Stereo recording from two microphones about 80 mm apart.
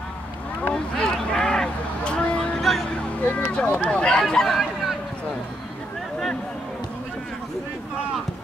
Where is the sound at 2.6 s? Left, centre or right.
Centre.